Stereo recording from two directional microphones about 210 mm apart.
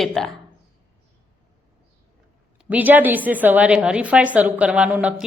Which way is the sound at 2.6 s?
10° right (ahead or behind).